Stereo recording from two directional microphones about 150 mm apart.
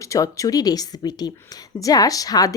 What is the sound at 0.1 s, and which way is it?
Speech, 20° left (ahead or behind).